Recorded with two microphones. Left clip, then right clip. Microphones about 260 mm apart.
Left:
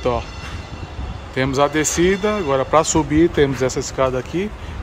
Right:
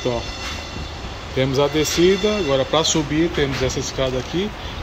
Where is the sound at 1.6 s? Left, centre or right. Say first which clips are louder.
Left 1 dB; centre.